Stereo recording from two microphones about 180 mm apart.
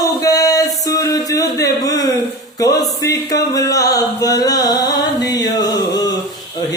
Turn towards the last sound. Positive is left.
turn(degrees=20)  # may be behind; listen again after turning